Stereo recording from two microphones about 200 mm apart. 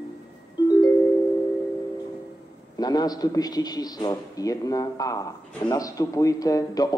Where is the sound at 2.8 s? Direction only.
20° left (ahead or behind).